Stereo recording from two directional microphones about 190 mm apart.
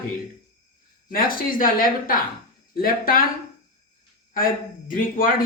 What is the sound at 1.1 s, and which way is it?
Speech, 45° left (ahead or behind).